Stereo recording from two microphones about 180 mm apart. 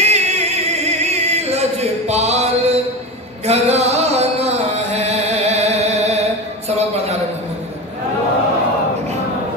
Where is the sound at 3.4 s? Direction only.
35° right (ahead or behind).